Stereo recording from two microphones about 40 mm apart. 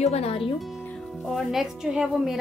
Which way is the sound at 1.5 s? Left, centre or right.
Centre.